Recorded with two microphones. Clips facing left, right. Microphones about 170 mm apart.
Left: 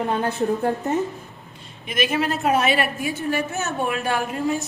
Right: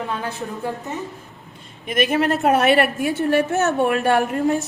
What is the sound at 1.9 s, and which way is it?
A woman's voice, 55° right (ahead or behind).